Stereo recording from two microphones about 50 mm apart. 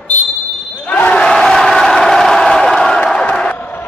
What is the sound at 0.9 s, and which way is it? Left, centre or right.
Basketball bounce, left.